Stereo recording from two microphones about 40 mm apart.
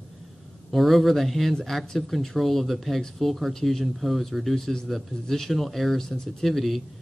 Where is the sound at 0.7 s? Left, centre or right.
Centre.